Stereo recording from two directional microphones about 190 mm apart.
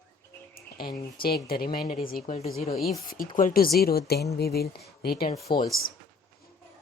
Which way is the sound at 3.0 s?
50° left (ahead or behind).